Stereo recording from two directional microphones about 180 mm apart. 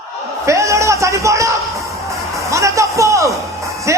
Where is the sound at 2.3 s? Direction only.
15° right (ahead or behind).